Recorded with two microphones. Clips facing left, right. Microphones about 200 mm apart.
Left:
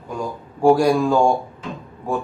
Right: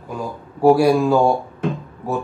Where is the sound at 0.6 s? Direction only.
5° right (ahead or behind).